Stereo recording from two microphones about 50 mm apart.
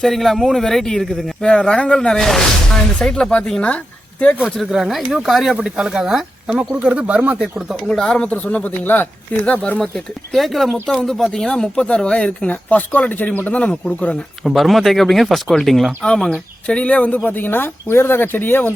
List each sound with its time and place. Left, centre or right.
0.0 s speech: centre
1.4 s speech: centre
4.5 s speech: centre
5.6 s speech: centre
6.8 s speech: right
7.9 s speech: centre
8.3 s speech: left
9.7 s speech: centre
10.3 s speech: centre
11.3 s speech: centre
14.4 s speech: centre
16.3 s speech: left
17.2 s speech: left